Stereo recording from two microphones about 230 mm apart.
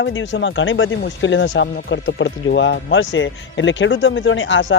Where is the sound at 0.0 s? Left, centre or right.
Left.